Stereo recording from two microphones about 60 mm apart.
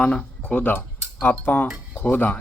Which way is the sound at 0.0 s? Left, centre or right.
Left.